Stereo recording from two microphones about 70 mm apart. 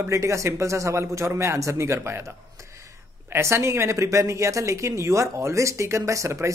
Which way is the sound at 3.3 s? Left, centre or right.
Right.